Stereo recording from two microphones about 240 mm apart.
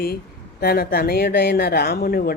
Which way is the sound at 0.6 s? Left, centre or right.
Left.